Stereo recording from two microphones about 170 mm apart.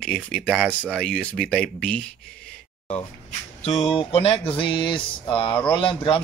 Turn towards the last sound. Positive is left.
turn(degrees=30)  # may be behind; listen again after turning